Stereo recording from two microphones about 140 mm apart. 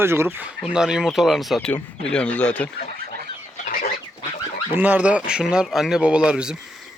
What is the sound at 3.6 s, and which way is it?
Chicken, 90° left.